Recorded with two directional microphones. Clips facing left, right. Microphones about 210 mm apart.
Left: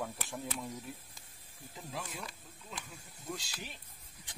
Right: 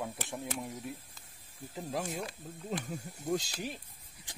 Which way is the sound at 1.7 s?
45° right (ahead or behind).